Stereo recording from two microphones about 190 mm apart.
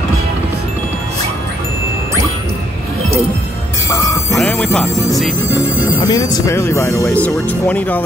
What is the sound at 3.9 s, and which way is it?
Speech, 15° left (ahead or behind).